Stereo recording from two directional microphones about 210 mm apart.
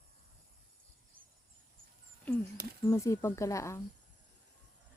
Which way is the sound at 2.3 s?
5° left (ahead or behind).